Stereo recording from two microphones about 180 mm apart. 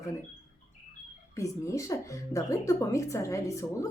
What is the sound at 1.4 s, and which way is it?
Speech, 20° left (ahead or behind).